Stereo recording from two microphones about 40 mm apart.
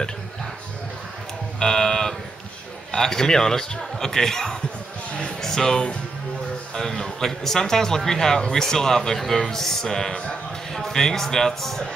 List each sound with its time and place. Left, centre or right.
1.6 s a man's voice: centre